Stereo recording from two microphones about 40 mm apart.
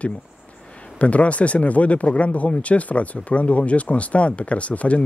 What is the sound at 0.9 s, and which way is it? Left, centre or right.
Speech, left.